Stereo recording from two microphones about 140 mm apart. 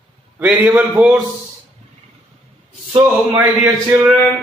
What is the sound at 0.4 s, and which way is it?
Speech, 10° right (ahead or behind).